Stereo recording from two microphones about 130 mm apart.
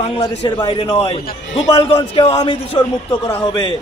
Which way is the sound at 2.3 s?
30° left (ahead or behind).